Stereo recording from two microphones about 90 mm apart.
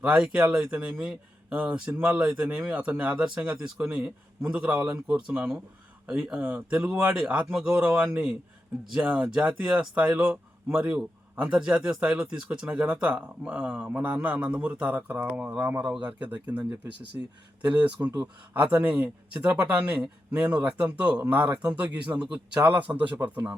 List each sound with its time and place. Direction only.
0.0 s speech: 10° right (ahead or behind)
18.0 s speech: 30° right (ahead or behind)
18.5 s speech: 15° right (ahead or behind)